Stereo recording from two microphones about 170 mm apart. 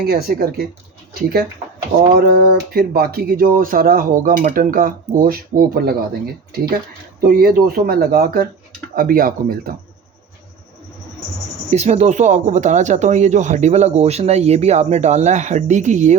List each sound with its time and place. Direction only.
0.1 s speech: 65° right (ahead or behind)
2.0 s speech: 70° right (ahead or behind)
7.3 s speech: 60° right (ahead or behind)
11.7 s speech: 40° right (ahead or behind)